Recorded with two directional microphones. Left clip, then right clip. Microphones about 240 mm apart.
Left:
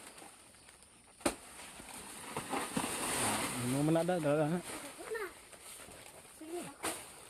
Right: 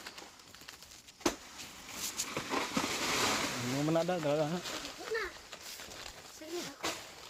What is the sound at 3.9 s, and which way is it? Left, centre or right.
Speech, left.